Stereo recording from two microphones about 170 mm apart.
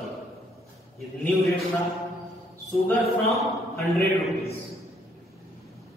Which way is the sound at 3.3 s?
Centre (ahead or behind).